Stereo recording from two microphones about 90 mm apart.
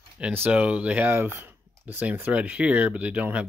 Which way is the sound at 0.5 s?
15° right (ahead or behind).